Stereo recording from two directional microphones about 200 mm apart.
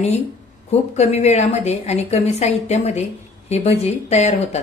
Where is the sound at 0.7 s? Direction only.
35° left (ahead or behind).